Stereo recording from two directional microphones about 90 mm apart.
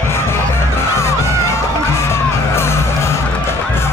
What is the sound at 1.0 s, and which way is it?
Music, 30° left (ahead or behind).